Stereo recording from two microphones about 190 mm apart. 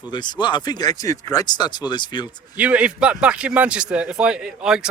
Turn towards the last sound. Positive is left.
turn(degrees=-5)  # may be behind; listen again after turning